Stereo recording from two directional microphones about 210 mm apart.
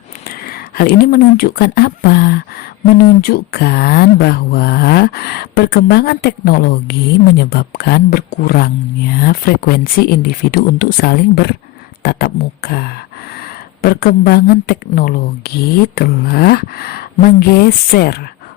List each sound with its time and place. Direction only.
0.3 s speech: 45° left (ahead or behind)